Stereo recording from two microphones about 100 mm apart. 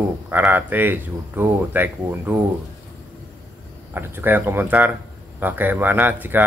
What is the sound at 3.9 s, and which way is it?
Speech, 20° right (ahead or behind).